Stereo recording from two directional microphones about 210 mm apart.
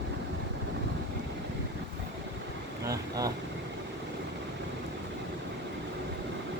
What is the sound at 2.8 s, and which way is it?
Vehicle, 15° right (ahead or behind).